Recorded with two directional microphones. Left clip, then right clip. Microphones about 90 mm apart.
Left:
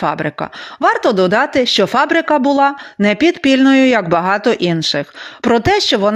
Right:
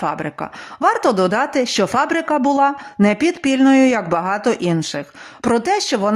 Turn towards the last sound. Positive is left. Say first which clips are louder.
# left 5 dB
turn(degrees=15)  # may be behind; listen again after turning